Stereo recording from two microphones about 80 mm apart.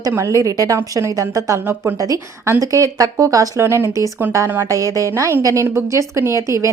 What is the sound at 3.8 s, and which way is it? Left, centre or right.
Speech, left.